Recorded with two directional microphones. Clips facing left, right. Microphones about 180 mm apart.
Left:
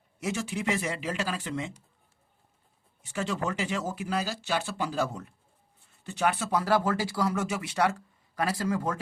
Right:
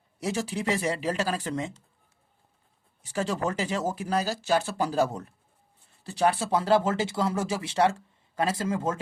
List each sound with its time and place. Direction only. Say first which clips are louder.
0.2 s speech: right 2 dB; 35° right (ahead or behind)
3.0 s speech: right 3 dB; 35° right (ahead or behind)